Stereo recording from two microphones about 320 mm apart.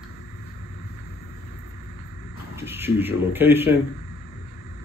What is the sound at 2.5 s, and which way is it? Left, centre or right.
Speech, centre.